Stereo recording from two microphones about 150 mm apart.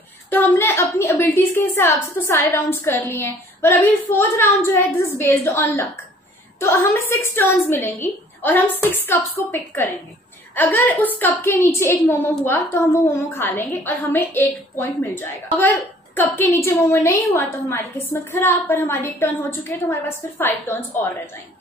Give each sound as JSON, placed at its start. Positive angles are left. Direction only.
{"t": 0.3, "sound": "a woman's voice", "side_deg": 15}